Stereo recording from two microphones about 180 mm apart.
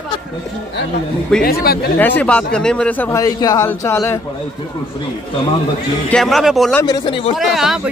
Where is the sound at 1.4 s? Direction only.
55° left (ahead or behind).